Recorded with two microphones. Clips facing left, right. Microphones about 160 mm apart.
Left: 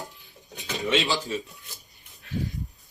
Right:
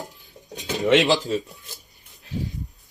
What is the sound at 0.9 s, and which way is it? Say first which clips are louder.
Speech: right 8 dB; 90° right.